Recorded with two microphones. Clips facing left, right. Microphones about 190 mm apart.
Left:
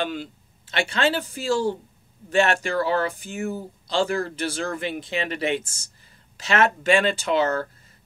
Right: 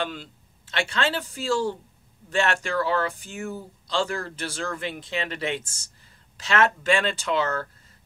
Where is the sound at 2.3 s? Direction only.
15° left (ahead or behind).